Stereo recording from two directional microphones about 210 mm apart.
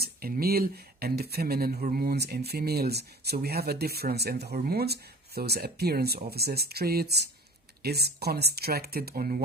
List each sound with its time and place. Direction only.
0.0 s speech: 45° right (ahead or behind)